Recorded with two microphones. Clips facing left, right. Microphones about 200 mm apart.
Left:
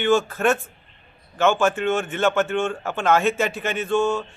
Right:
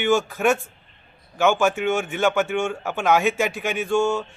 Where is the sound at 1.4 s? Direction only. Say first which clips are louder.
Even; 15° right (ahead or behind).